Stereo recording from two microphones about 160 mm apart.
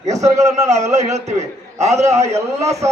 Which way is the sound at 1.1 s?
45° right (ahead or behind).